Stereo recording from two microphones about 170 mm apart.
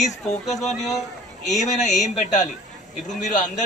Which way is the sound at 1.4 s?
40° left (ahead or behind).